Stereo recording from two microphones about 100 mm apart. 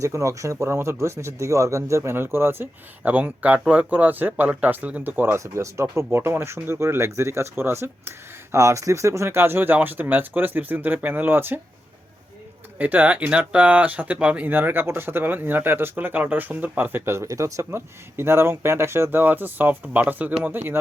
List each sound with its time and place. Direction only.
0.0 s speech: 30° right (ahead or behind)
12.8 s speech: 15° right (ahead or behind)